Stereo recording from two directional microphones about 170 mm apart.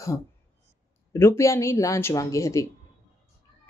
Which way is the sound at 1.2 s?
15° left (ahead or behind).